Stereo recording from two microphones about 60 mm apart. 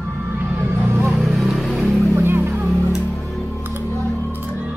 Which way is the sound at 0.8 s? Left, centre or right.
Right.